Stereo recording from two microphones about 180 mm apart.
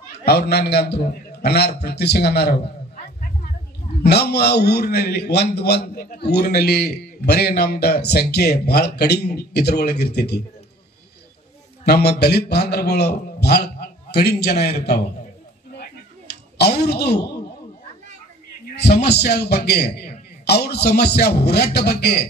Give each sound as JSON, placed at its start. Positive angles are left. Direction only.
{"t": 0.2, "sound": "a man's voice", "side_deg": 65}
{"t": 4.0, "sound": "a man's voice", "side_deg": 65}
{"t": 11.8, "sound": "a man's voice", "side_deg": 65}
{"t": 15.7, "sound": "a sound", "side_deg": 65}
{"t": 18.7, "sound": "a man's voice", "side_deg": 65}